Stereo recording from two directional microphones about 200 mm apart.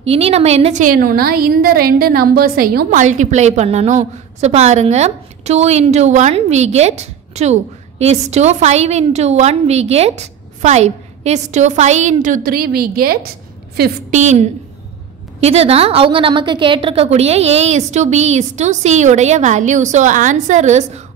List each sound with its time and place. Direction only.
0.0 s a woman's voice: 30° right (ahead or behind); by 13.2 s 50° right (ahead or behind)
14.1 s a woman's voice: 35° right (ahead or behind)